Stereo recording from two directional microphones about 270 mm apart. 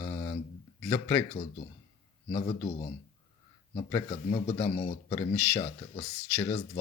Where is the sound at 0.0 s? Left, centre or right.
Left.